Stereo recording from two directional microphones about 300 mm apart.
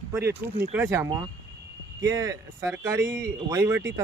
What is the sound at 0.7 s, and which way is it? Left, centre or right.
Speech, centre.